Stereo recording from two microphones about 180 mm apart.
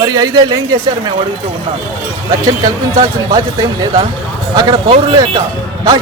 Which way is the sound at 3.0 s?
20° right (ahead or behind).